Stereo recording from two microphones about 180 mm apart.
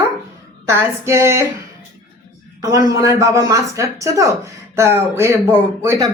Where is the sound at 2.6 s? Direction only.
20° right (ahead or behind).